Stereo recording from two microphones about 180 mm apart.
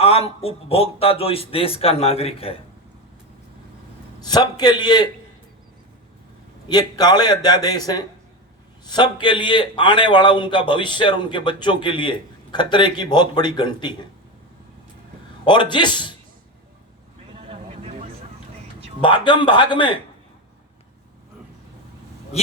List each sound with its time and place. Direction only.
0.0 s speech: 35° left (ahead or behind)
4.2 s a man's voice: 20° left (ahead or behind)
6.7 s a man's voice: 20° left (ahead or behind)
15.4 s a man's voice: 25° left (ahead or behind)
17.5 s vehicle: 35° right (ahead or behind)
19.0 s a man's voice: 25° left (ahead or behind)